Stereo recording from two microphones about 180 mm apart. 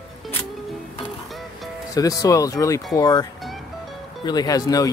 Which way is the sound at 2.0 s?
20° left (ahead or behind).